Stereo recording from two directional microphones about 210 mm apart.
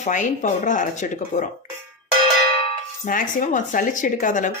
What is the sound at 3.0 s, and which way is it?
Dishes, 40° left (ahead or behind).